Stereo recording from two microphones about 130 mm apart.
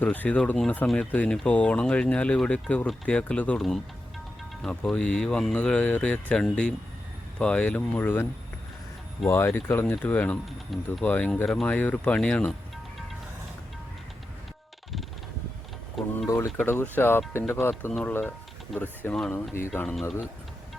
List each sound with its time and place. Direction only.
0.0 s speech: 10° left (ahead or behind)
16.0 s a sound: centre (ahead or behind)
16.6 s speech: 15° left (ahead or behind)
18.7 s speech: centre (ahead or behind)
19.3 s speech: 20° left (ahead or behind)